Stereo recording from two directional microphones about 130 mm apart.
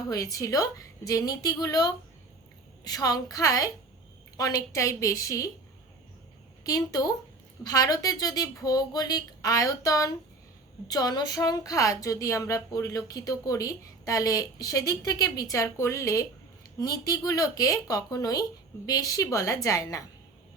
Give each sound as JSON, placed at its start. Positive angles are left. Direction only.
{"t": 0.1, "sound": "speech", "side_deg": 25}
{"t": 6.7, "sound": "speech", "side_deg": 25}